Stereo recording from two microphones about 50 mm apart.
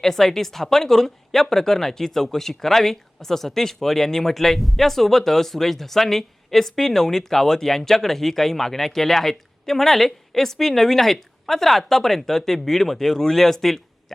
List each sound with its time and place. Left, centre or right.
0.0 s speech: centre